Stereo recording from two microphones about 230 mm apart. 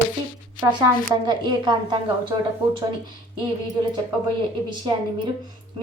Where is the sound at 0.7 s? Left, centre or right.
Centre.